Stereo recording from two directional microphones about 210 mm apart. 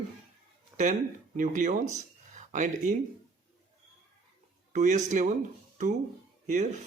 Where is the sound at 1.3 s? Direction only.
35° right (ahead or behind).